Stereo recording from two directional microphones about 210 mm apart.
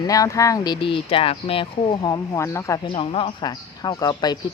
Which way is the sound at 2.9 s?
25° left (ahead or behind).